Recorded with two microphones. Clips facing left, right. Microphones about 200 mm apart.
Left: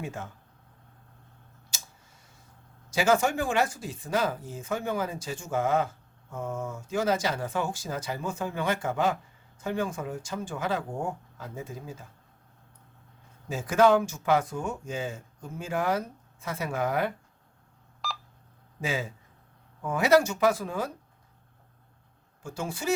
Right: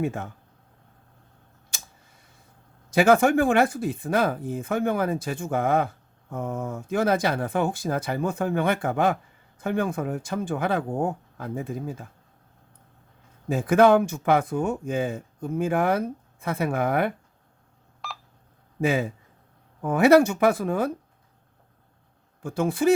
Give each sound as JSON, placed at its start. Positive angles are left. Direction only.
{"t": 0.0, "sound": "speech", "side_deg": -55}
{"t": 2.9, "sound": "speech", "side_deg": -55}
{"t": 13.5, "sound": "speech", "side_deg": -55}
{"t": 18.8, "sound": "speech", "side_deg": -55}
{"t": 22.4, "sound": "speech", "side_deg": -55}